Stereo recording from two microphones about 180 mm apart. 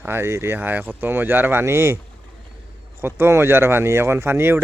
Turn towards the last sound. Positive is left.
turn(degrees=-15)  # may be behind; listen again after turning